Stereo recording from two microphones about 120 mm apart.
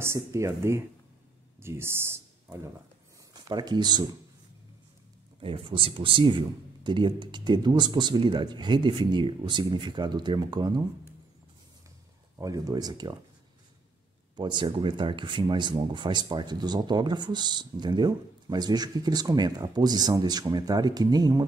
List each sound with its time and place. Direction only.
0.0 s speech: 25° right (ahead or behind)
3.4 s speech: 35° right (ahead or behind)
5.4 s speech: 45° right (ahead or behind)
12.4 s speech: 30° right (ahead or behind)
14.3 s speech: 40° right (ahead or behind)